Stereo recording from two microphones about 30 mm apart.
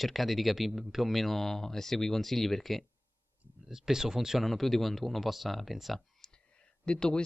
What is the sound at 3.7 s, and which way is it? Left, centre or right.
Speech, centre.